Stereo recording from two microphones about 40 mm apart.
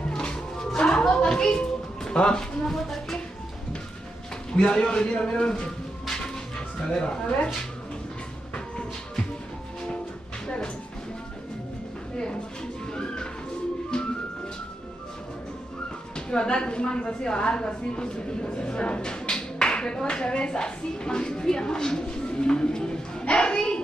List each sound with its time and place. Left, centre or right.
0.1 s music: left
2.7 s speech: centre
4.6 s a woman's voice: left
6.9 s a woman's voice: centre
12.9 s music: left
16.3 s a woman's voice: left